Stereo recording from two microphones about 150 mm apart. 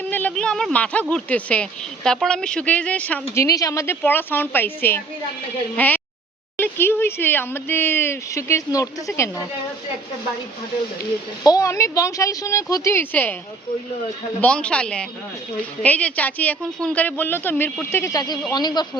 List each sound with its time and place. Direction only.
0.0 s speech: 10° left (ahead or behind)
3.3 s speech: 20° left (ahead or behind)
11.4 s speech: 20° left (ahead or behind)
14.4 s speech: 5° left (ahead or behind); by 18.9 s 30° left (ahead or behind)